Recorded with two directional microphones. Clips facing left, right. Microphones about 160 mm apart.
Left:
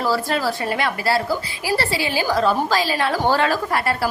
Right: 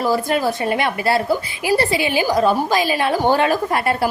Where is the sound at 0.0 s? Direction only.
15° right (ahead or behind).